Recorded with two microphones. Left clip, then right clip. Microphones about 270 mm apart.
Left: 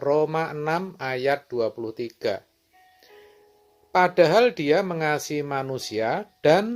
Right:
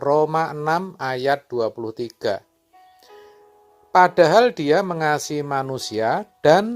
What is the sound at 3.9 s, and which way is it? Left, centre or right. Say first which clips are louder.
Speech: right 4 dB; right.